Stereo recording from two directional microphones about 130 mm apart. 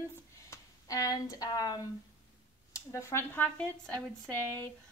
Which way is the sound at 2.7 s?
20° left (ahead or behind).